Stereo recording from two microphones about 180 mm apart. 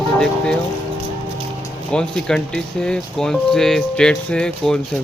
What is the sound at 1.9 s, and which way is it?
Speech, 5° left (ahead or behind).